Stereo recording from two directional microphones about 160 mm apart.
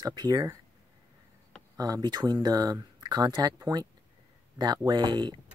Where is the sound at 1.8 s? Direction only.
25° right (ahead or behind).